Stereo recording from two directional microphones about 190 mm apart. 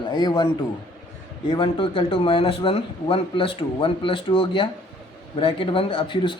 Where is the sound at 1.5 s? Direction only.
25° left (ahead or behind).